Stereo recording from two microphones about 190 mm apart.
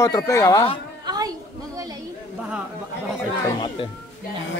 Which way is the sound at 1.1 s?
20° right (ahead or behind).